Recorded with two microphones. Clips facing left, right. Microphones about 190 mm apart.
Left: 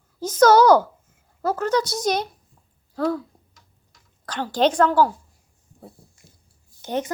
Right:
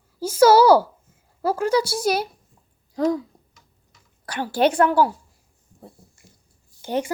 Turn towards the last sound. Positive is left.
turn(degrees=-10)  # may be behind; listen again after turning